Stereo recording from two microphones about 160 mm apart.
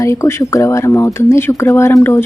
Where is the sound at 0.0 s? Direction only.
20° left (ahead or behind).